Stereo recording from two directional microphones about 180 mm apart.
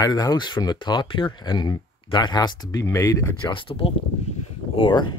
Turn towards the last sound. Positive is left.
turn(degrees=25)  # may be behind; listen again after turning